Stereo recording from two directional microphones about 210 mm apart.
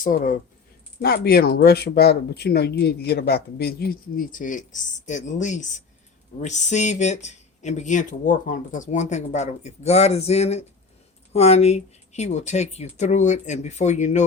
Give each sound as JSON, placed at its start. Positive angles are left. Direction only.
{"t": 0.0, "sound": "speech", "side_deg": 40}